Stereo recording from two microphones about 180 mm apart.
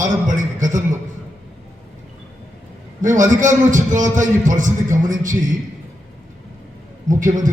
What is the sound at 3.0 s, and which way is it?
A man's voice, 45° right (ahead or behind).